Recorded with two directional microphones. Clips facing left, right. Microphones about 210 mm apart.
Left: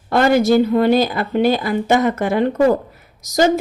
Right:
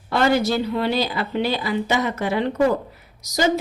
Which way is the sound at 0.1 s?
50° left (ahead or behind).